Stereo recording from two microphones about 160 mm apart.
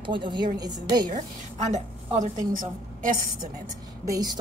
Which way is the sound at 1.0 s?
50° right (ahead or behind).